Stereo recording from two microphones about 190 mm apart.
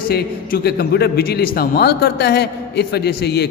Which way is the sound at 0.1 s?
55° left (ahead or behind).